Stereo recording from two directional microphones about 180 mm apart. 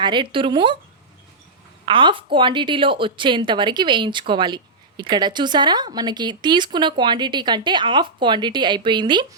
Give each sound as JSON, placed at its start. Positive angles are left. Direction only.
{"t": 0.0, "sound": "a woman's voice", "side_deg": -25}
{"t": 1.8, "sound": "a woman's voice", "side_deg": -30}